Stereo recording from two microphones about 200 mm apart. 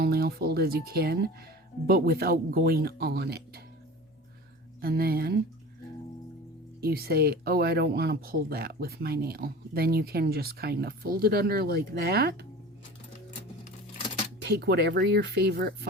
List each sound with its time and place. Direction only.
0.0 s speech: 50° right (ahead or behind)
4.8 s speech: 50° right (ahead or behind)
6.8 s speech: 50° right (ahead or behind)
14.4 s speech: 55° right (ahead or behind)